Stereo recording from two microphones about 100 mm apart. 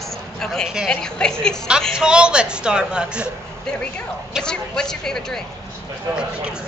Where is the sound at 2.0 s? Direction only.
10° right (ahead or behind).